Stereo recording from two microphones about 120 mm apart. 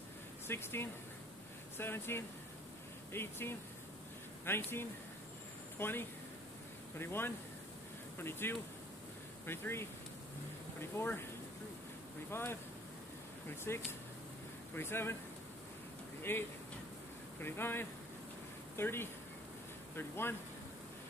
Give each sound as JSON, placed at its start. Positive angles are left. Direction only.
{"t": 0.5, "sound": "speech", "side_deg": 20}
{"t": 5.8, "sound": "speech", "side_deg": 20}
{"t": 12.3, "sound": "speech", "side_deg": 20}
{"t": 16.2, "sound": "speech", "side_deg": 20}